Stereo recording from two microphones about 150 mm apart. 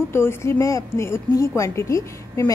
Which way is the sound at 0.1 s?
15° left (ahead or behind).